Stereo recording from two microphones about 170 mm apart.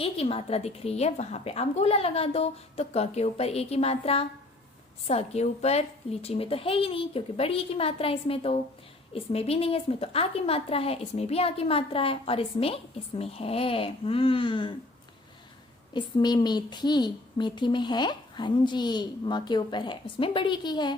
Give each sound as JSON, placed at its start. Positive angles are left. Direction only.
{"t": 0.0, "sound": "a woman's voice", "side_deg": 35}
{"t": 15.9, "sound": "speech", "side_deg": 25}